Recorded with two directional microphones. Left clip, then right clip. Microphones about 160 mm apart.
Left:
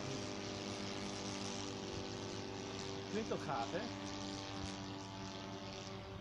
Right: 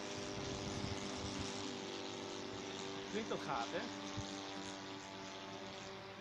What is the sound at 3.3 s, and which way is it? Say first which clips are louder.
Speech: even; 45° left (ahead or behind).